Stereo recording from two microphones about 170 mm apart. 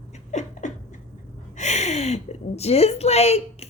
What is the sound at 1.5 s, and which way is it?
A woman's voice, 40° left (ahead or behind).